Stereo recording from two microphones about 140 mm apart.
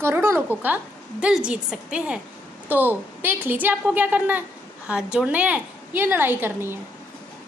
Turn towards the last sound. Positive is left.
turn(degrees=-15)  # may be behind; listen again after turning